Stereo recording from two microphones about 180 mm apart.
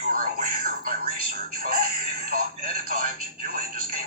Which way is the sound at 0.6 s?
55° right (ahead or behind).